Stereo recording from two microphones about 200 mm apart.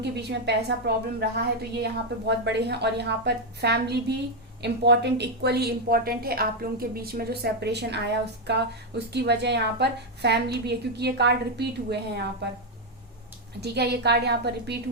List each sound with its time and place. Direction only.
0.0 s a woman's voice: 55° right (ahead or behind)
9.1 s a woman's voice: 55° right (ahead or behind)
13.6 s a woman's voice: 55° right (ahead or behind)